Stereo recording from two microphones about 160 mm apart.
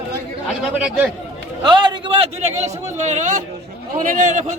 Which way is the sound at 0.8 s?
10° right (ahead or behind).